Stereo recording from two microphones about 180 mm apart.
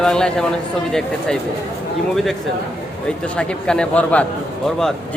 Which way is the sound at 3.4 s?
5° left (ahead or behind).